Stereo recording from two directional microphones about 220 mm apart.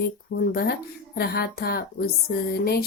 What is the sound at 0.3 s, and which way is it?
Speech, 45° left (ahead or behind).